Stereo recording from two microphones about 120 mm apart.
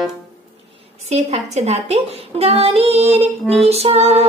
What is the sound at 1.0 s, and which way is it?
A woman's voice, 65° right (ahead or behind).